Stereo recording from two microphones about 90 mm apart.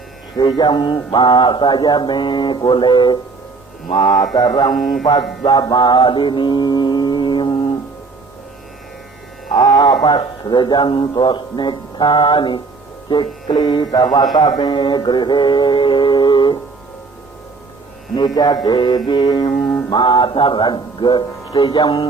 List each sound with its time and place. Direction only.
0.3 s speech: 60° left (ahead or behind)
3.9 s mantra: 50° left (ahead or behind)
4.8 s mantra: centre (ahead or behind)
5.4 s mantra: 45° left (ahead or behind)
9.6 s a sound: 50° left (ahead or behind)
10.0 s speech: 50° left (ahead or behind)
14.3 s mantra: 50° left (ahead or behind)
14.6 s speech: 65° left (ahead or behind)
18.3 s speech: 50° left (ahead or behind)
19.5 s music: 10° left (ahead or behind)
19.9 s speech: 55° left (ahead or behind)